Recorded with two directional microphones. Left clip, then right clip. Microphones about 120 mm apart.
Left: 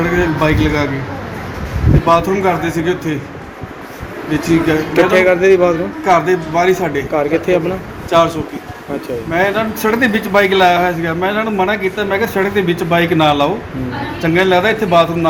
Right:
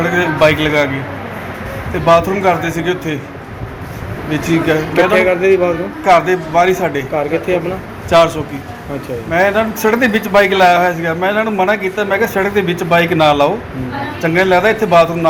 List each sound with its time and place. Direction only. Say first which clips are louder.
0.0 s a man's voice: right 3 dB; 20° right (ahead or behind)
2.0 s a man's voice: right 2 dB; 20° right (ahead or behind)
4.3 s a man's voice: even; 20° right (ahead or behind)
5.1 s a man's voice: left 2 dB; 25° left (ahead or behind)
6.1 s a man's voice: right 2 dB; 15° right (ahead or behind)
7.1 s a man's voice: left 5 dB; 25° left (ahead or behind)
9.3 s a man's voice: right 3 dB; 5° right (ahead or behind)
14.4 s a man's voice: right 2 dB; 5° left (ahead or behind)